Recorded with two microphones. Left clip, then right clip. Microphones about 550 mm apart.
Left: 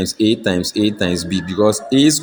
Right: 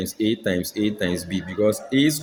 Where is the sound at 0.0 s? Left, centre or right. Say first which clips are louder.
Left 7 dB; right.